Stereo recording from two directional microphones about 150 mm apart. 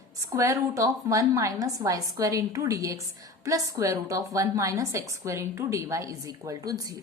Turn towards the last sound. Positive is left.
turn(degrees=-25)  # may be behind; listen again after turning